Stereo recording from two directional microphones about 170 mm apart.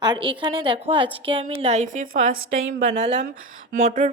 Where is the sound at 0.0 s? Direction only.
25° right (ahead or behind).